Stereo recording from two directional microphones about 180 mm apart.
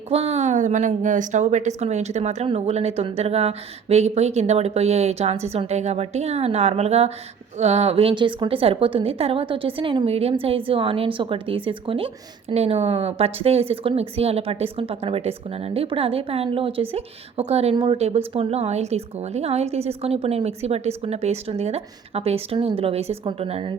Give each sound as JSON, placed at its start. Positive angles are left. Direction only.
{"t": 0.1, "sound": "a woman's voice", "side_deg": -35}